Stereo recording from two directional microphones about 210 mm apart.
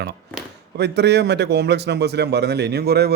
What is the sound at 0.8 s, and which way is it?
A man's voice, 50° right (ahead or behind).